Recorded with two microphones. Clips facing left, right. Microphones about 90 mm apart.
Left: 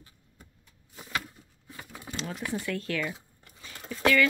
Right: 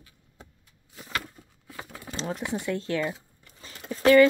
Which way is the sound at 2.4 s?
20° right (ahead or behind).